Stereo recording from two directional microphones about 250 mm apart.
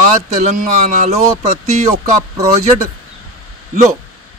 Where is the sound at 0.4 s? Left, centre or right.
Right.